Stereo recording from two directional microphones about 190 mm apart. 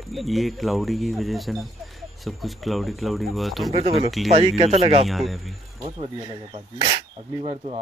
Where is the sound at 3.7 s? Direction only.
30° right (ahead or behind).